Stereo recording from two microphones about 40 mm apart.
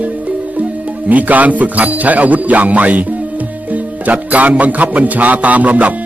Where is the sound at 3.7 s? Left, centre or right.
Right.